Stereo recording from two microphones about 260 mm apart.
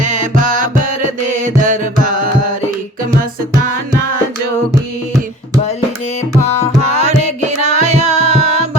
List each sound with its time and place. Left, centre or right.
0.0 s music: right
7.0 s music: right